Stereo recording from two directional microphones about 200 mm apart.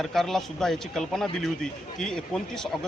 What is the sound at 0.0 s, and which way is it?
A man's voice, centre (ahead or behind).